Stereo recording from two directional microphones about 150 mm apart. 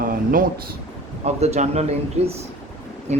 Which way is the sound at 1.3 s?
45° right (ahead or behind).